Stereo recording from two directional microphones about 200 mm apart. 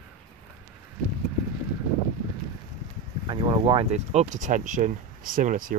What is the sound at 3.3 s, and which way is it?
Speech, 25° right (ahead or behind).